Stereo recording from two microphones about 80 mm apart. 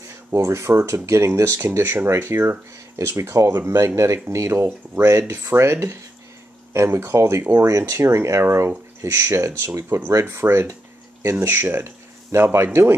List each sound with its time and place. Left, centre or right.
0.5 s speech: right